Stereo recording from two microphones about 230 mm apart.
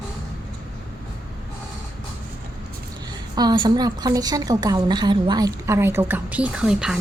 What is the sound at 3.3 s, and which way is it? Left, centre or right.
A woman's voice, centre.